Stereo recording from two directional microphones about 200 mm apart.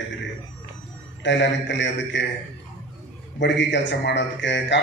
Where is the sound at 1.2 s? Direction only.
65° left (ahead or behind).